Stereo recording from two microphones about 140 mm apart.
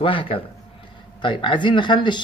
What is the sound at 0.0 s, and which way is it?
Speech, 40° left (ahead or behind).